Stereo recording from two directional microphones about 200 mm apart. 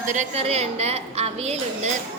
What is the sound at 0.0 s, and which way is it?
A woman's voice, 35° right (ahead or behind).